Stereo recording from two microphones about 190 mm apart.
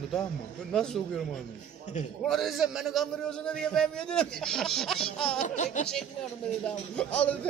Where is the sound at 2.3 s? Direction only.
Centre (ahead or behind).